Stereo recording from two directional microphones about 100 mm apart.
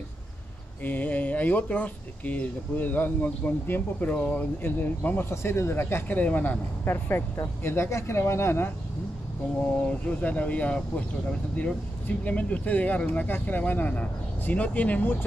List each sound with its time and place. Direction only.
0.8 s speech: 15° left (ahead or behind)
9.8 s speech: 15° left (ahead or behind)
12.3 s speech: 15° left (ahead or behind)